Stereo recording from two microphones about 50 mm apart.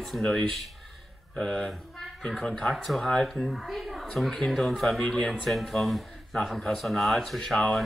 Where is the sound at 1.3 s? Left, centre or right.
Centre.